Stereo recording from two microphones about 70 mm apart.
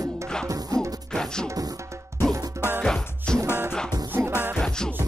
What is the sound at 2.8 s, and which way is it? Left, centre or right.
Music, centre.